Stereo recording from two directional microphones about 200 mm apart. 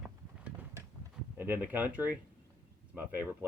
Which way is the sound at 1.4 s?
10° right (ahead or behind).